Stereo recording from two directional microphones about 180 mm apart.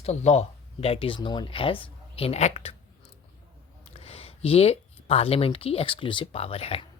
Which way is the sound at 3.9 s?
35° left (ahead or behind).